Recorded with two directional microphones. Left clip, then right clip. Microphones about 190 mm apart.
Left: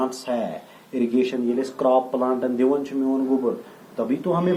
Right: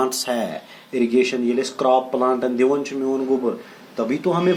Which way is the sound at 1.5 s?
45° right (ahead or behind).